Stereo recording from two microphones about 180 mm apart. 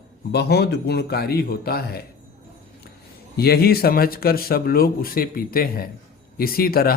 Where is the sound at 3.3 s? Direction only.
60° left (ahead or behind).